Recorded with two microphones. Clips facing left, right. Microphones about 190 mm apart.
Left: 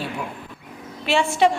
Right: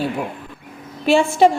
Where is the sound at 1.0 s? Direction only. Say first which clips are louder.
Right 5 dB; 40° right (ahead or behind).